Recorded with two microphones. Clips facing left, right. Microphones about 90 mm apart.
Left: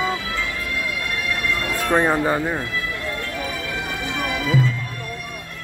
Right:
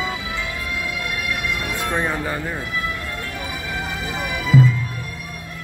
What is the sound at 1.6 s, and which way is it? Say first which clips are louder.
Music: left 1 dB; 15° right (ahead or behind).